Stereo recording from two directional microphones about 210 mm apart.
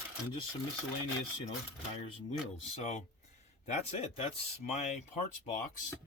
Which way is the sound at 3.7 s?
30° left (ahead or behind).